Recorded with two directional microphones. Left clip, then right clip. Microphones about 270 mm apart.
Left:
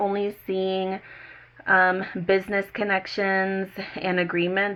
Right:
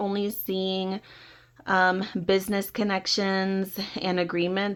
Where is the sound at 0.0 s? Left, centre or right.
Right.